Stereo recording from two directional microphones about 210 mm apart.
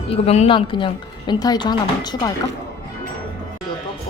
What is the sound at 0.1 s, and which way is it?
A woman's voice, 30° left (ahead or behind).